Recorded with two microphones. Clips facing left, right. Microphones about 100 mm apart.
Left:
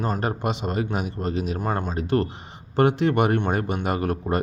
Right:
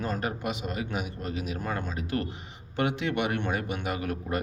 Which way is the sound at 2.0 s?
35° left (ahead or behind).